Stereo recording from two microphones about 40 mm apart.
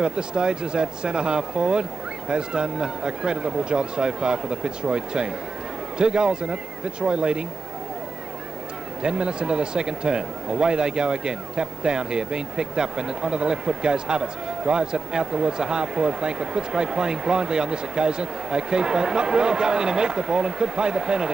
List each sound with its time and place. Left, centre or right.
0.0 s speech: right
9.0 s speech: right